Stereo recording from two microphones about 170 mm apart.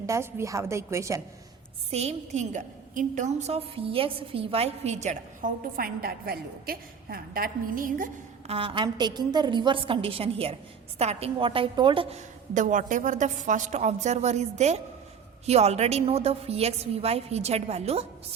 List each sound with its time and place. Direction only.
0.0 s a woman's voice: 15° right (ahead or behind)
1.9 s a woman's voice: 40° right (ahead or behind)
8.4 s a woman's voice: 35° right (ahead or behind)
12.1 s a woman's voice: 45° right (ahead or behind)